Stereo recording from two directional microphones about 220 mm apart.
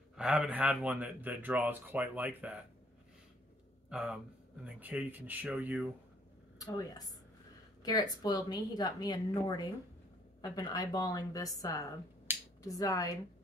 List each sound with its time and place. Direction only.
0.1 s speech: 5° right (ahead or behind)
3.9 s speech: 5° right (ahead or behind)
6.6 s a woman's voice: 15° left (ahead or behind)
12.3 s finger snapping: 10° right (ahead or behind)
12.6 s a woman's voice: 15° left (ahead or behind)